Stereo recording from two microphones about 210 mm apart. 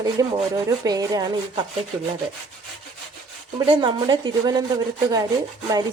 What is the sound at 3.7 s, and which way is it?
Speech, 20° right (ahead or behind).